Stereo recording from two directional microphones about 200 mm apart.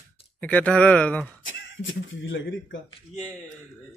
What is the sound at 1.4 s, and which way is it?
Speech, 70° left (ahead or behind).